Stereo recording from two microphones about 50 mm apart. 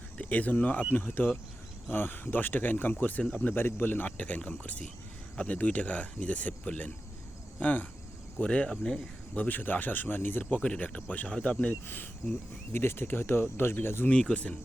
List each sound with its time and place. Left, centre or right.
0.2 s speech: left
1.9 s speech: left
3.6 s speech: left
4.2 s speech: left
8.4 s speech: left
9.3 s speech: left
10.6 s speech: left
11.3 s speech: centre
12.2 s speech: left
14.1 s speech: centre